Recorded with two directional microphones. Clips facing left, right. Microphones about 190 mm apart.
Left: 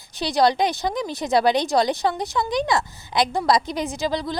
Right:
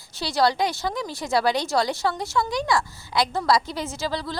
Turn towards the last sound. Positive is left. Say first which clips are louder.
# left 4 dB
turn(degrees=20)  # may be behind; listen again after turning